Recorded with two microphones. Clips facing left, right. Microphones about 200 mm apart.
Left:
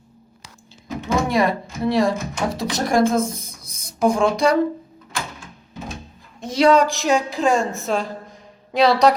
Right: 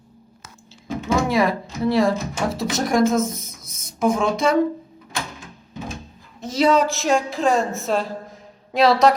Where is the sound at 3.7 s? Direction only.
Centre (ahead or behind).